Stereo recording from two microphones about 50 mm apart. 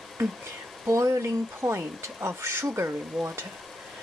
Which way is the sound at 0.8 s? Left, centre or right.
Right.